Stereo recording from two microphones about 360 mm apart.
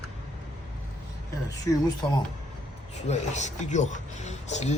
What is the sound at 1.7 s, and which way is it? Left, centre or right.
Speech, centre.